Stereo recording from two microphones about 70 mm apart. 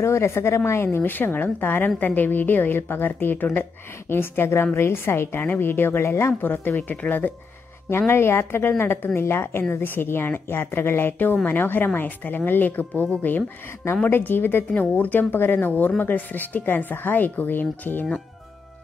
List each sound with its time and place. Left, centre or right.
0.0 s a woman's voice: left